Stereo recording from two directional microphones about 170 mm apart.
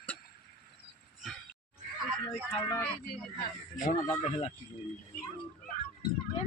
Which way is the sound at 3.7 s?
50° left (ahead or behind).